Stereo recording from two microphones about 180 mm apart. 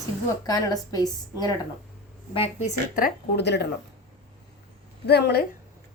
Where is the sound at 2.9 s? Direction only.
60° left (ahead or behind).